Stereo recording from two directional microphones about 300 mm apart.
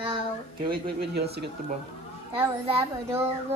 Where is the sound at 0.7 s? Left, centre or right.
Right.